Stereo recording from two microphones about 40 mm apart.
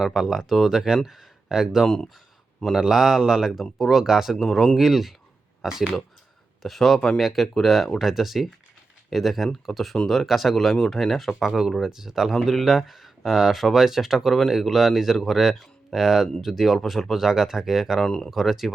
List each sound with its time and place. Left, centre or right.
0.0 s speech: centre
6.6 s speech: centre
7.4 s speech: centre
7.9 s speech: centre
18.0 s speech: centre
18.3 s speech: centre